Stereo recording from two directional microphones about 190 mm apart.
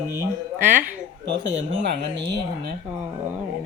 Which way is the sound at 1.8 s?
65° right (ahead or behind).